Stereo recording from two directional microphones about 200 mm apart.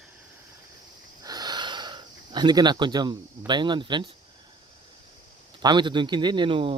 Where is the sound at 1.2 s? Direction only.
20° right (ahead or behind).